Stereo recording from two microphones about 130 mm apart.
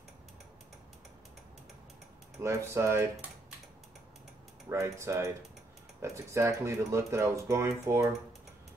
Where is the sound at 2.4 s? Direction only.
20° right (ahead or behind).